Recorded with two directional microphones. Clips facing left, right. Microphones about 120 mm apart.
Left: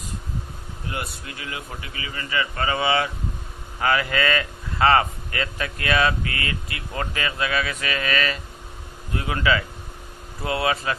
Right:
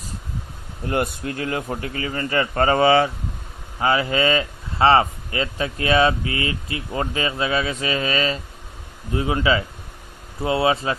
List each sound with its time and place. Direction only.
0.8 s a man's voice: 50° right (ahead or behind)
3.8 s speech: 25° right (ahead or behind)